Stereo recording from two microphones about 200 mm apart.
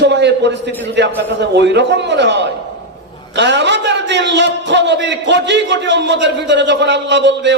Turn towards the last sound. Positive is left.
turn(degrees=-60)  # may be behind; listen again after turning